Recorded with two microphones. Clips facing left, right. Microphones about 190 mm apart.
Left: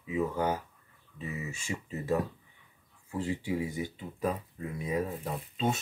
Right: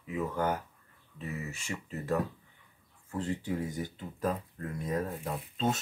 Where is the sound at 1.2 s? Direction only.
15° left (ahead or behind).